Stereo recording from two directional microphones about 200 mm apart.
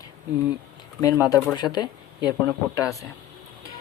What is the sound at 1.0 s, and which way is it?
Speech, 15° left (ahead or behind).